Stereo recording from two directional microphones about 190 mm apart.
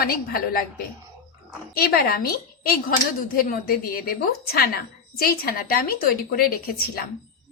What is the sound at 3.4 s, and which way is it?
Speech, 50° left (ahead or behind).